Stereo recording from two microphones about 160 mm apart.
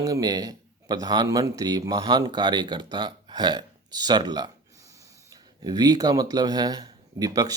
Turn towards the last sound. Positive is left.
turn(degrees=-25)  # may be behind; listen again after turning